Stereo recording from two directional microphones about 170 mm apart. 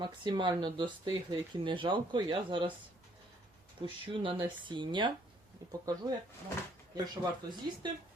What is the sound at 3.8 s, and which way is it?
Speech, 30° right (ahead or behind).